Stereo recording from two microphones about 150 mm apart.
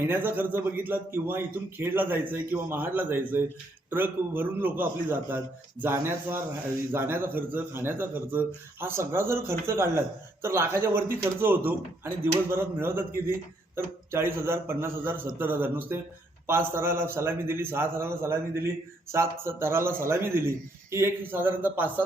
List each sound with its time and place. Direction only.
0.0 s a man's voice: 10° right (ahead or behind)